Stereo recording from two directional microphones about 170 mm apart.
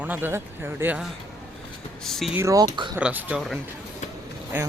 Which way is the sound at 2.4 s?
20° right (ahead or behind).